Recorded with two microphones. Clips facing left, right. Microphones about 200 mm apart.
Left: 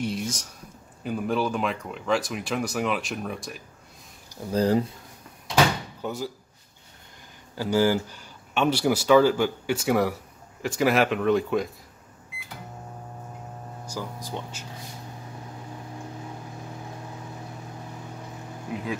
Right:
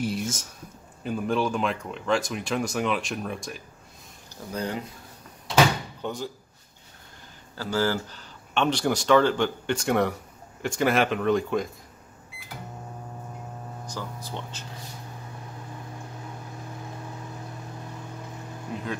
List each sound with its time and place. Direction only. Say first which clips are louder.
0.0 s speech: even; centre (ahead or behind)
4.5 s speech: left 9 dB; 35° left (ahead or behind)
6.0 s speech: left 1 dB; 5° left (ahead or behind)
7.5 s speech: left 4 dB; 15° left (ahead or behind)
13.8 s speech: left 3 dB; 10° left (ahead or behind)
18.7 s speech: left 2 dB; 10° left (ahead or behind)